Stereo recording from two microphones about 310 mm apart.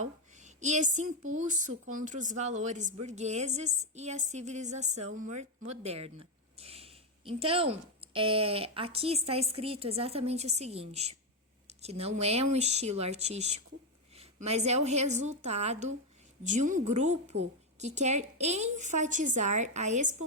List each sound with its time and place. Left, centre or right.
0.3 s a woman's voice: right